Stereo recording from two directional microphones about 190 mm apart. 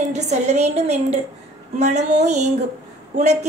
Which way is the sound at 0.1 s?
35° right (ahead or behind).